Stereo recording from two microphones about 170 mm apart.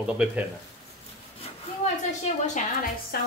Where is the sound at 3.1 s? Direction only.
65° left (ahead or behind).